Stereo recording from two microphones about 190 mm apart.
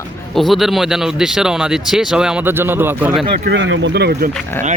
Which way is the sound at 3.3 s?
60° right (ahead or behind).